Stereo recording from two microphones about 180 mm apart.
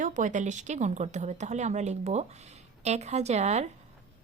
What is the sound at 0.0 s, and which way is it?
Speech, 45° right (ahead or behind).